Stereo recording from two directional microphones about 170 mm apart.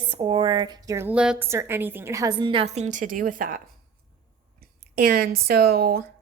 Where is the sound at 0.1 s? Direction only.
30° right (ahead or behind); by 3.6 s 55° right (ahead or behind).